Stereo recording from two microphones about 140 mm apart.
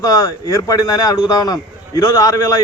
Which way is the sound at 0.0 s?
25° left (ahead or behind).